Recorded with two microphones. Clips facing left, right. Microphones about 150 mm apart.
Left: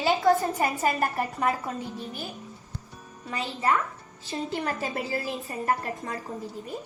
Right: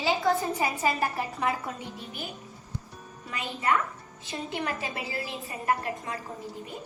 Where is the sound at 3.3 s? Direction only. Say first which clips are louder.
Left 2 dB; 30° left (ahead or behind).